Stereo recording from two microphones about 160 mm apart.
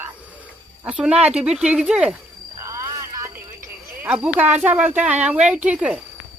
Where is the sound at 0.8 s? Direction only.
10° right (ahead or behind).